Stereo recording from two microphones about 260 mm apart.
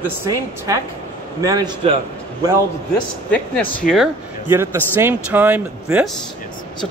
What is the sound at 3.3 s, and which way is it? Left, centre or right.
A man's voice, centre.